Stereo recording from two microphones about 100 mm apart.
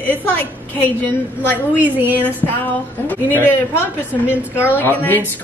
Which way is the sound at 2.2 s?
20° left (ahead or behind).